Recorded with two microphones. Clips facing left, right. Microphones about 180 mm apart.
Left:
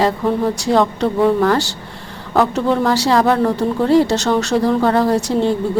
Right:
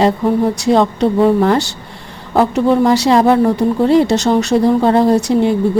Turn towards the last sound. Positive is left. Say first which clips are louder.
# right 4 dB
turn(degrees=-15)  # may be behind; listen again after turning